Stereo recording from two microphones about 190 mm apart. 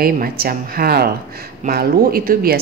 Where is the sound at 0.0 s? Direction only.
50° right (ahead or behind).